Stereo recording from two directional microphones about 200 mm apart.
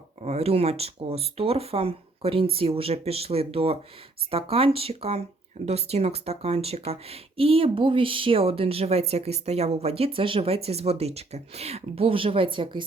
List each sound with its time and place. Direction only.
0.2 s speech: 30° right (ahead or behind)